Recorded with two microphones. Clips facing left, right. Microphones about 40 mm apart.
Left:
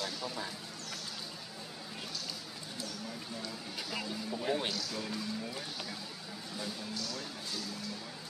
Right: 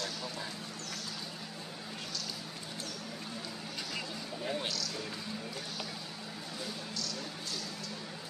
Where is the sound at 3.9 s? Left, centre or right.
Centre.